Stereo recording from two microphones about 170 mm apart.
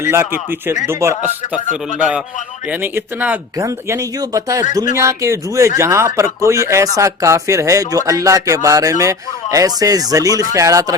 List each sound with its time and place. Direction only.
0.0 s speech: 15° right (ahead or behind)
2.8 s speech: 10° right (ahead or behind)